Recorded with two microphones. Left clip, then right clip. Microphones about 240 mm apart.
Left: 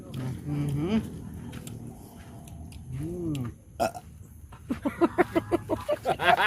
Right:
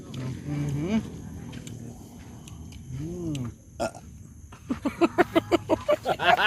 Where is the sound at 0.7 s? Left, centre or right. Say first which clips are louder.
Even; centre.